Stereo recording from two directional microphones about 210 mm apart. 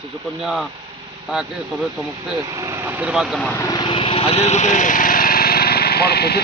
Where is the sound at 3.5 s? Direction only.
15° left (ahead or behind).